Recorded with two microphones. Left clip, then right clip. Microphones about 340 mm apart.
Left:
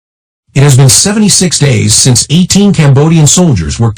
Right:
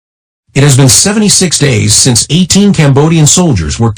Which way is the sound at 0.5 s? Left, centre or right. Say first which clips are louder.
Right 1 dB; centre.